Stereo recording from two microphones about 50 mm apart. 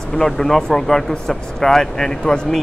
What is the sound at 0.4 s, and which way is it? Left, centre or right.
Speech, centre.